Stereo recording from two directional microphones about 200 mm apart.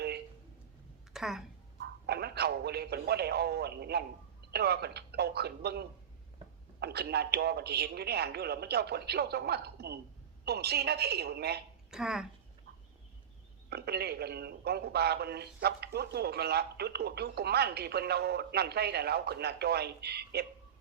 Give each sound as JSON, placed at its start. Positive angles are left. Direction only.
{"t": 1.1, "sound": "speech", "side_deg": 0}
{"t": 1.8, "sound": "a man's voice", "side_deg": -55}
{"t": 11.9, "sound": "a woman's voice", "side_deg": -5}
{"t": 13.7, "sound": "a man's voice", "side_deg": -55}